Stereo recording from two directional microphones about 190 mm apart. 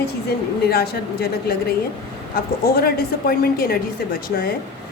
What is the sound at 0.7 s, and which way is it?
A woman's voice, 55° left (ahead or behind).